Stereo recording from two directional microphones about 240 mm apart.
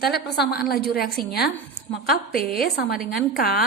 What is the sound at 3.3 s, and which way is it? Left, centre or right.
Speech, left.